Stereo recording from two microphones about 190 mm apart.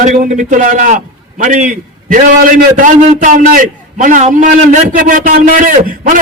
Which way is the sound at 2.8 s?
40° right (ahead or behind).